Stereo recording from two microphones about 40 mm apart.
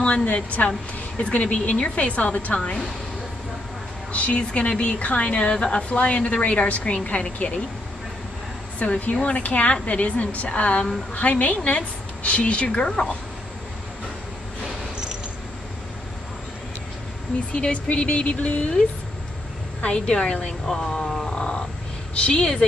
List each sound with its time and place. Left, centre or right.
0.0 s a woman's voice: left
2.5 s a woman's voice: left
4.1 s a woman's voice: left
8.7 s a woman's voice: left
12.6 s a woman's voice: left
17.6 s a woman's voice: left
19.8 s a woman's voice: left
21.3 s roaring cats: left
22.1 s a woman's voice: left